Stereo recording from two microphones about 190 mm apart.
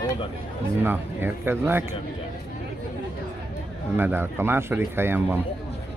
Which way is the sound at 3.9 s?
10° right (ahead or behind).